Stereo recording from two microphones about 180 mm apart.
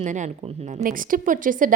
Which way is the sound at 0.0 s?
40° right (ahead or behind).